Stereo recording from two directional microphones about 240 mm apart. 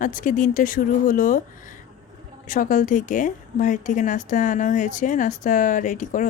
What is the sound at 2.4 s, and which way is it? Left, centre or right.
Speech, left.